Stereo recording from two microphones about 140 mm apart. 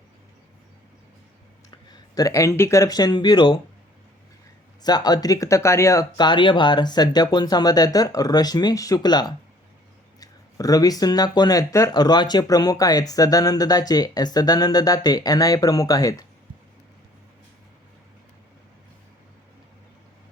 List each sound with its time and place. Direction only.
1.9 s speech: 25° left (ahead or behind)
4.8 s speech: 30° left (ahead or behind)